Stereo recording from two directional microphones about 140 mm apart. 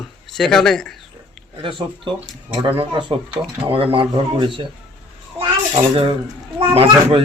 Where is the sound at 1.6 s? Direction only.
35° right (ahead or behind).